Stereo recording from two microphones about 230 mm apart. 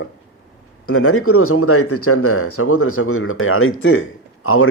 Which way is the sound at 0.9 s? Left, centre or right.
Left.